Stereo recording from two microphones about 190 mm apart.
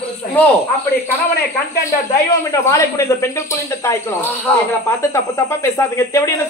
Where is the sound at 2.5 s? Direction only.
15° left (ahead or behind).